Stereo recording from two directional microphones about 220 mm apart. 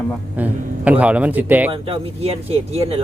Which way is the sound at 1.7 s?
25° right (ahead or behind).